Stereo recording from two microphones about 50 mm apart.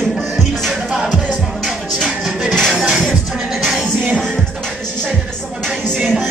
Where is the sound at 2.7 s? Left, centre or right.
Centre.